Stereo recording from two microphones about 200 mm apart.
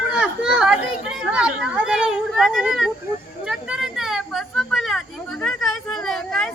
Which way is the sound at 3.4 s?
Centre (ahead or behind).